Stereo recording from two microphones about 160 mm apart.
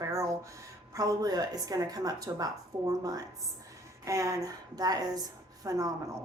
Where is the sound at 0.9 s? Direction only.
25° right (ahead or behind).